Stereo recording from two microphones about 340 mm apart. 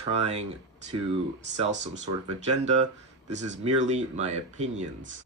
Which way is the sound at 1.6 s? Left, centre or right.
Right.